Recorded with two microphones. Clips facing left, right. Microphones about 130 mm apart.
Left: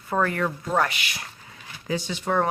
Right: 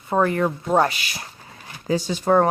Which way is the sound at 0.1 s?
25° right (ahead or behind).